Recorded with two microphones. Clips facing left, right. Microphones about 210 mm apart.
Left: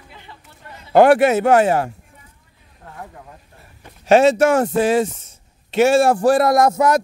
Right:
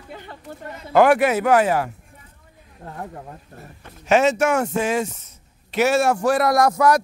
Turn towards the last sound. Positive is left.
turn(degrees=25)  # may be behind; listen again after turning